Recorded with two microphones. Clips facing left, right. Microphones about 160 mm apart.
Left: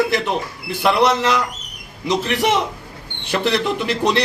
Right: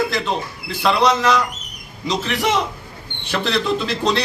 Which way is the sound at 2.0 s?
15° left (ahead or behind).